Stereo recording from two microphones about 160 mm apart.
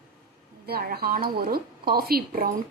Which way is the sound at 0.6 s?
70° right (ahead or behind).